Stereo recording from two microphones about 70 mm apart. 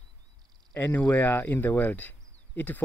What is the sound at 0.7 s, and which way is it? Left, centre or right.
Speech, left.